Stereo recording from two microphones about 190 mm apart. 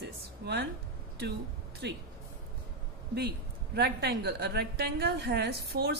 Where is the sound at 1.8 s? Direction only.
65° right (ahead or behind).